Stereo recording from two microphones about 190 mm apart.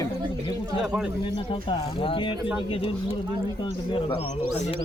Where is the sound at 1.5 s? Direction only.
30° left (ahead or behind).